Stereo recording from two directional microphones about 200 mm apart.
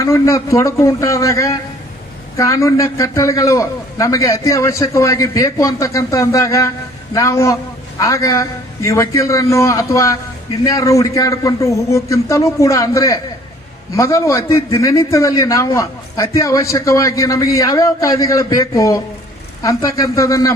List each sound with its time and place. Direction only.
0.0 s a man's voice: 15° left (ahead or behind)